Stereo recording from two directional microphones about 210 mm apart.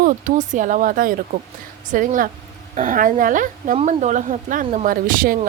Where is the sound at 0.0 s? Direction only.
35° right (ahead or behind).